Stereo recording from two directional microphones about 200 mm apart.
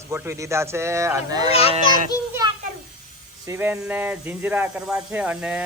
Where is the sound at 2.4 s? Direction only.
20° right (ahead or behind).